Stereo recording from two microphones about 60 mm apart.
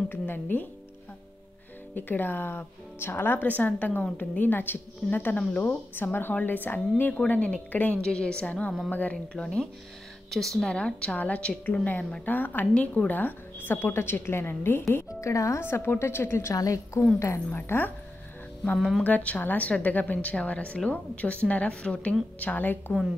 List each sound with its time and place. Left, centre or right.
0.1 s speech: left
2.0 s a woman's voice: left
3.3 s a woman's voice: left
8.0 s speech: centre
10.7 s a woman's voice: centre; by 15.0 s left
15.1 s speech: left
15.6 s a woman's voice: left
16.5 s a woman's voice: left
17.6 s a woman's voice: left
19.0 s a woman's voice: left